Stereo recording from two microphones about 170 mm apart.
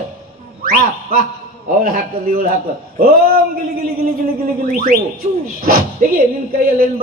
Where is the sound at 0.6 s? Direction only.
60° right (ahead or behind).